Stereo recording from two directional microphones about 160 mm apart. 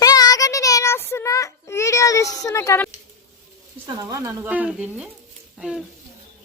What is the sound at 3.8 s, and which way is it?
Speech, 20° right (ahead or behind).